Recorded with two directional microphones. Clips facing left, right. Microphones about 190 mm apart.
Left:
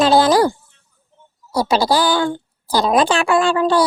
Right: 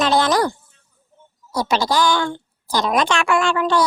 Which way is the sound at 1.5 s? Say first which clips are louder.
Left 3 dB; 35° left (ahead or behind).